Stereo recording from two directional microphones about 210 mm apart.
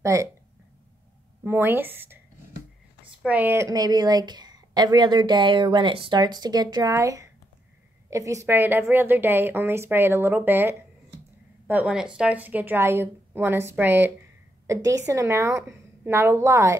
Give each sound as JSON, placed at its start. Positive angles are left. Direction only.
{"t": 0.0, "sound": "speech", "side_deg": -15}
{"t": 1.4, "sound": "a woman's voice", "side_deg": -10}
{"t": 3.2, "sound": "a woman's voice", "side_deg": -5}